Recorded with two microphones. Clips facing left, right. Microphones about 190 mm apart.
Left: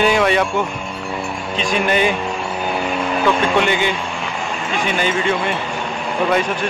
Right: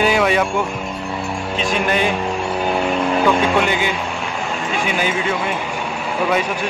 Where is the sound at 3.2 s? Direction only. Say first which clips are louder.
Left 2 dB; 5° right (ahead or behind).